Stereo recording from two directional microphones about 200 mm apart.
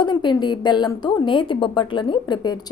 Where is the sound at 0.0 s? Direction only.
20° left (ahead or behind).